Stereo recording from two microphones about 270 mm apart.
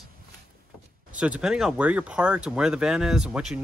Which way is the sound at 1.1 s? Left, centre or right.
Centre.